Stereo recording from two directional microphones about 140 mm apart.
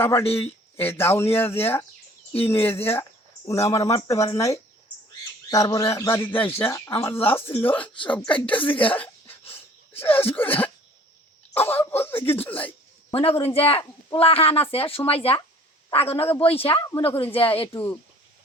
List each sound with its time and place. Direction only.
0.3 s speech: 15° left (ahead or behind)
9.0 s cough: 15° left (ahead or behind)
11.5 s speech: 15° left (ahead or behind)
13.1 s speech: 45° left (ahead or behind)
17.7 s speech: 15° left (ahead or behind)